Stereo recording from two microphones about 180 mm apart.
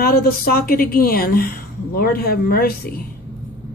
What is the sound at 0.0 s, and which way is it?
Speech, 55° left (ahead or behind).